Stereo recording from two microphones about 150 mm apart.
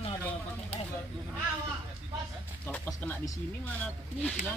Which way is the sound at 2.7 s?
10° left (ahead or behind).